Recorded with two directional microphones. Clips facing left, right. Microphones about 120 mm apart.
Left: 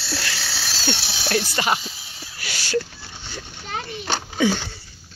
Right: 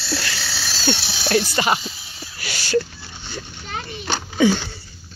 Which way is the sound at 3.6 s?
35° left (ahead or behind).